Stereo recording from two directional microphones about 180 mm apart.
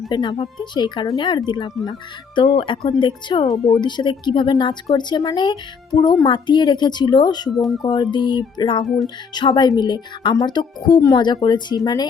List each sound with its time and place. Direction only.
0.1 s speech: 25° left (ahead or behind)
3.5 s speech: centre (ahead or behind)
3.8 s speech: 25° left (ahead or behind)
7.5 s speech: centre (ahead or behind)
7.8 s speech: 25° left (ahead or behind)